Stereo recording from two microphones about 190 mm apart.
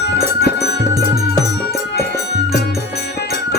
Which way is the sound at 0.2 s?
60° left (ahead or behind).